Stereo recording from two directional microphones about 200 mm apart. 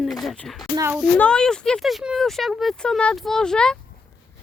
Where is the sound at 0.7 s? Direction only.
15° right (ahead or behind).